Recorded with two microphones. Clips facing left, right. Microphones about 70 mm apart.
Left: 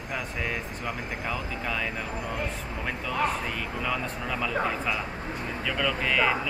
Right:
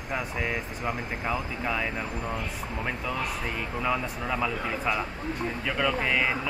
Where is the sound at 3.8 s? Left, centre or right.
Centre.